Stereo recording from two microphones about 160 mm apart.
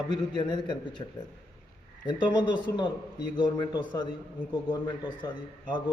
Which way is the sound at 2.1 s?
30° left (ahead or behind).